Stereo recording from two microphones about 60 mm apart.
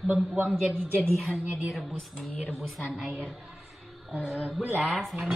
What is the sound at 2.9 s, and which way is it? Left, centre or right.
Speech, centre.